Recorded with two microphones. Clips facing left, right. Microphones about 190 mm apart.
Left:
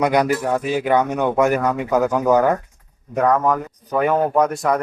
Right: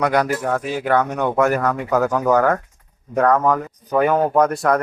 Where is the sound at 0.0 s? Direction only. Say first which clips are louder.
Left 1 dB; 15° left (ahead or behind).